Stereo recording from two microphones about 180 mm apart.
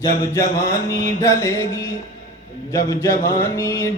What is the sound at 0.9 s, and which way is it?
Music, 15° left (ahead or behind).